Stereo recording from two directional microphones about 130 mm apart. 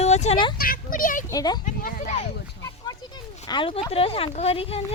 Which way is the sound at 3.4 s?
40° left (ahead or behind).